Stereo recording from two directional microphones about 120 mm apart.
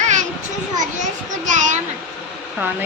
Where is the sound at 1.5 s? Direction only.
90° right.